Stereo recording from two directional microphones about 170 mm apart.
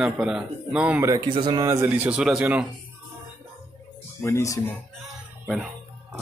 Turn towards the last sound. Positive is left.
turn(degrees=0)  # may be behind; listen again after turning